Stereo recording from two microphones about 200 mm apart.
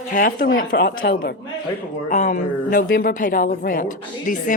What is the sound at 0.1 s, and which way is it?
Speech, 45° left (ahead or behind).